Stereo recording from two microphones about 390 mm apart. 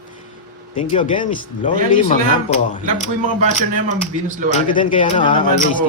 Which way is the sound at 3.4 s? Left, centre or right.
Centre.